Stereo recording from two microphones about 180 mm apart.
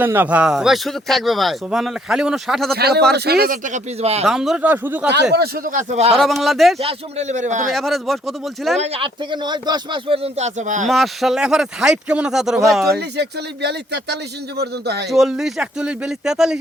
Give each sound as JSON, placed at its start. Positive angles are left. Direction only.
{"t": 0.0, "sound": "speech", "side_deg": -10}
{"t": 2.7, "sound": "a man's voice", "side_deg": -60}
{"t": 4.3, "sound": "speech", "side_deg": -5}
{"t": 5.1, "sound": "a man's voice", "side_deg": -65}
{"t": 6.1, "sound": "speech", "side_deg": 0}
{"t": 6.7, "sound": "speech", "side_deg": -35}
{"t": 7.7, "sound": "speech", "side_deg": 0}
{"t": 8.8, "sound": "speech", "side_deg": -30}
{"t": 10.8, "sound": "speech", "side_deg": 0}
{"t": 13.0, "sound": "a man's voice", "side_deg": -65}
{"t": 15.1, "sound": "speech", "side_deg": 0}